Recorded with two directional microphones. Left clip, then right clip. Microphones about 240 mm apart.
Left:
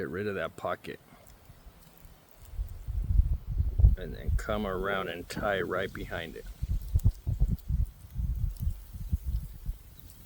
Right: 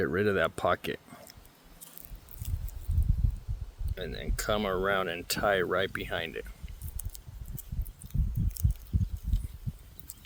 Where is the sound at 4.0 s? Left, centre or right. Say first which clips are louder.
Right 4 dB; right.